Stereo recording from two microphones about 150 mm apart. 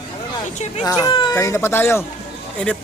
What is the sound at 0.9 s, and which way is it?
Speech, 25° left (ahead or behind).